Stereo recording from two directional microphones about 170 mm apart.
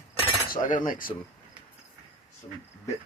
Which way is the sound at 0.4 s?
55° left (ahead or behind).